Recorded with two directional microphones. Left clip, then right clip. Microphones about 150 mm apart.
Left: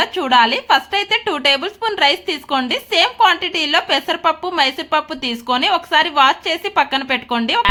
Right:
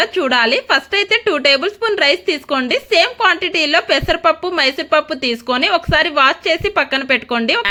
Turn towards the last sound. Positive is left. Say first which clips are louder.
# right 3 dB
turn(degrees=-20)  # may be behind; listen again after turning